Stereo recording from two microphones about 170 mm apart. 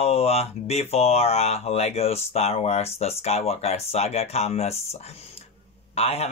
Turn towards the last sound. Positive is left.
turn(degrees=35)  # may be behind; listen again after turning